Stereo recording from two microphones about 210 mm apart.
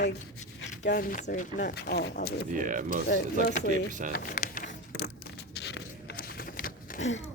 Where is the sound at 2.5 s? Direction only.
40° right (ahead or behind).